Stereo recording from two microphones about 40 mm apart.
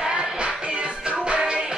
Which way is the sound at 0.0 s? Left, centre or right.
Right.